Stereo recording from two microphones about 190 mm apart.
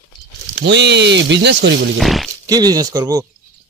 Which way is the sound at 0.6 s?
65° right (ahead or behind).